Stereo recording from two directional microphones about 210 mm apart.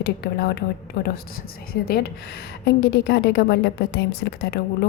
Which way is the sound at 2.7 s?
55° left (ahead or behind).